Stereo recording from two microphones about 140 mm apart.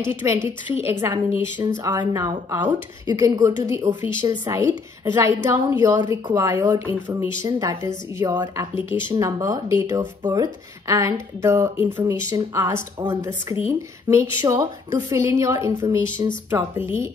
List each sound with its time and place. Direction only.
0.1 s speech: 15° right (ahead or behind)
6.9 s speech: 15° right (ahead or behind)
7.4 s speech: 25° right (ahead or behind)